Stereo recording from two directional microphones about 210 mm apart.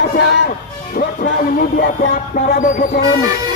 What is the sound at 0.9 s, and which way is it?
Speech, 45° left (ahead or behind).